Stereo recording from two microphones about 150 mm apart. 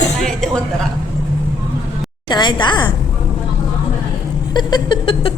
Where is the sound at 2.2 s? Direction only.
30° left (ahead or behind).